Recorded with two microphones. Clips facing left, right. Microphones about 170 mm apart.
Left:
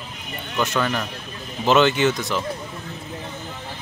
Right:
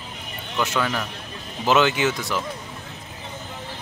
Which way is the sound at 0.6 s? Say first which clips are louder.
Left 1 dB; 5° right (ahead or behind).